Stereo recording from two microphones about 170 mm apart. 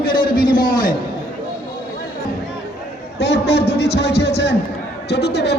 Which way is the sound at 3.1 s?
75° left (ahead or behind).